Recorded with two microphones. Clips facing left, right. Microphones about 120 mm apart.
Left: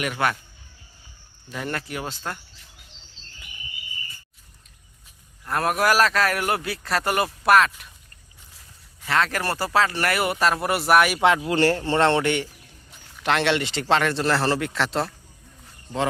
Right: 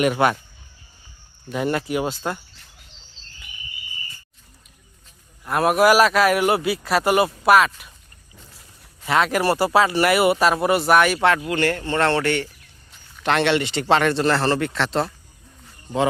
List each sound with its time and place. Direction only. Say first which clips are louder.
0.0 s speech: right 6 dB; 20° right (ahead or behind)
1.5 s a man's voice: right 7 dB; 15° right (ahead or behind)
5.5 s a man's voice: right 5 dB; 5° right (ahead or behind)
9.0 s a man's voice: right 5 dB; 15° right (ahead or behind); by 11.4 s 15° left (ahead or behind)
11.4 s speech: left 1 dB; 30° left (ahead or behind); by 12.5 s 15° left (ahead or behind)
13.2 s a man's voice: right 3 dB; centre (ahead or behind)